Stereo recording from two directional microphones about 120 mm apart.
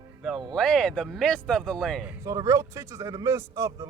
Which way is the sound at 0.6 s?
5° left (ahead or behind).